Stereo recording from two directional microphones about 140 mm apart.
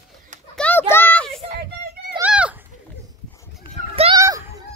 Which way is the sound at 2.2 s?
10° right (ahead or behind).